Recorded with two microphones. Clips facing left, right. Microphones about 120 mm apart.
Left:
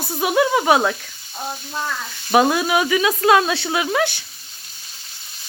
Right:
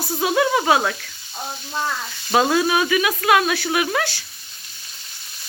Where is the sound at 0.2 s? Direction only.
20° left (ahead or behind).